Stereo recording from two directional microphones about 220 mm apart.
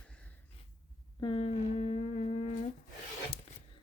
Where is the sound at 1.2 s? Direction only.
25° left (ahead or behind).